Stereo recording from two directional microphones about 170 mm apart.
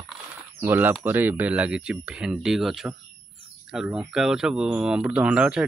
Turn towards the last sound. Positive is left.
turn(degrees=-5)  # may be behind; listen again after turning